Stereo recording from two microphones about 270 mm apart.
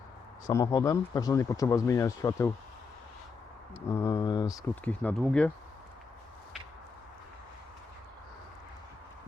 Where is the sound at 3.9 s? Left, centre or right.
Centre.